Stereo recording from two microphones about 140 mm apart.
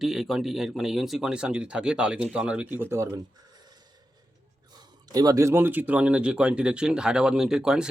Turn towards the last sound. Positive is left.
turn(degrees=-5)  # may be behind; listen again after turning